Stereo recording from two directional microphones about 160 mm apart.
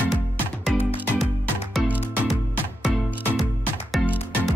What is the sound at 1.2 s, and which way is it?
Music, centre (ahead or behind).